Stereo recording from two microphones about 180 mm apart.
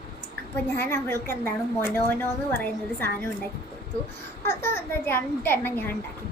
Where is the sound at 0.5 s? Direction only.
10° left (ahead or behind).